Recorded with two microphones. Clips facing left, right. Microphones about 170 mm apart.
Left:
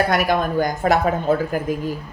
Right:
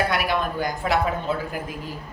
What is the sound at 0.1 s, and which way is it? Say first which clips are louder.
Speech: left 5 dB; 45° left (ahead or behind).